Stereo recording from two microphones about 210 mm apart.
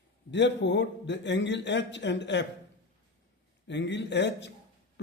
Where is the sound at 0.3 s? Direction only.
55° left (ahead or behind).